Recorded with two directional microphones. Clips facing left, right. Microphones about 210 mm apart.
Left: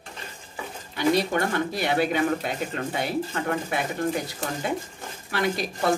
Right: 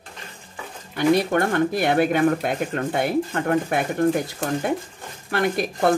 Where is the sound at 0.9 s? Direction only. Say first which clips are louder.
Right 4 dB; 50° right (ahead or behind).